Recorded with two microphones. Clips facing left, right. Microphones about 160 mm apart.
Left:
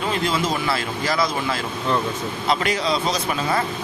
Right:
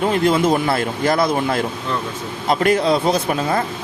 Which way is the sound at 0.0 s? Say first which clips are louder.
Right 7 dB; 50° right (ahead or behind).